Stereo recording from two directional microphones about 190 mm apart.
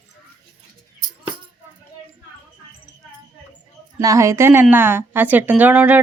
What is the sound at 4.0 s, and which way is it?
A woman's voice, 15° right (ahead or behind).